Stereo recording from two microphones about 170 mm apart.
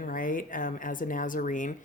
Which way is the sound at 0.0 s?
55° left (ahead or behind).